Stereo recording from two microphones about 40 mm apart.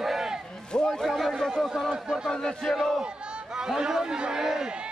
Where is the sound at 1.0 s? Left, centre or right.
Centre.